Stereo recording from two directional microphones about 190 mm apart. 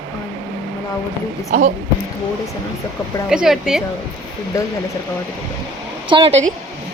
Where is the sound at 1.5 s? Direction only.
40° right (ahead or behind).